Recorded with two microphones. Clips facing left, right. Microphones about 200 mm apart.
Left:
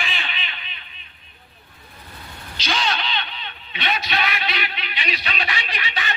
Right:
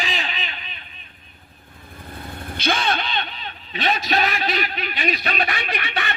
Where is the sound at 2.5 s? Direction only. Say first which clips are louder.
Right 3 dB; 55° right (ahead or behind).